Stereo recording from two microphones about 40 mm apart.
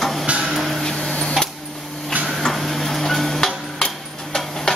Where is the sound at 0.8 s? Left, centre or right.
Centre.